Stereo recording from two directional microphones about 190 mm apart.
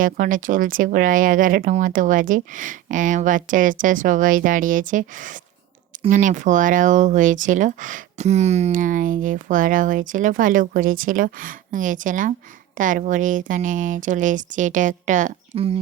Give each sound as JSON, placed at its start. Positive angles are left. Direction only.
{"t": 0.0, "sound": "speech", "side_deg": -45}